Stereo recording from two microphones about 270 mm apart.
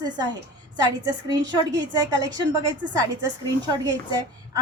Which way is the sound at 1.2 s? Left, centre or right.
Right.